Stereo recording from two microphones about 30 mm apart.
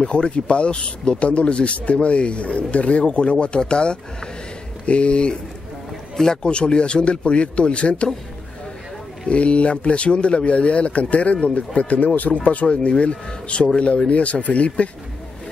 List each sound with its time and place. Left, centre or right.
0.0 s speech: left
6.1 s speech: centre
6.4 s speech: left
9.3 s speech: left
12.6 s speech: left